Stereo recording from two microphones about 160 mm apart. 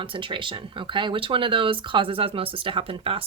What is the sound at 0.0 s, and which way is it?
Speech, 30° right (ahead or behind).